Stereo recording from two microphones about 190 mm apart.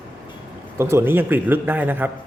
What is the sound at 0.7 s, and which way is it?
A man's voice, 15° right (ahead or behind).